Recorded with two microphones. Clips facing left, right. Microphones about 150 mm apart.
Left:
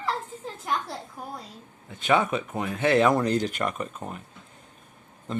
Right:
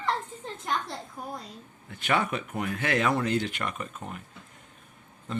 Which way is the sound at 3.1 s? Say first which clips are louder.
Left 3 dB; 40° left (ahead or behind).